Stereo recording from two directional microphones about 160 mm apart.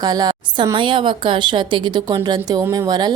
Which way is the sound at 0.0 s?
25° right (ahead or behind).